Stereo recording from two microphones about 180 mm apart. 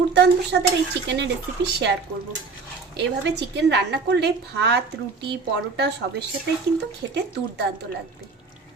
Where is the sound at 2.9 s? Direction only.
75° right (ahead or behind).